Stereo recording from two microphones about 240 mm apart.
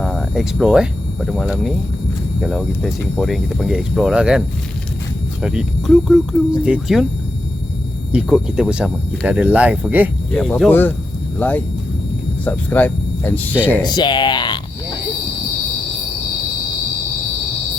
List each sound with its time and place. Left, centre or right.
0.0 s speech: centre
8.1 s speech: centre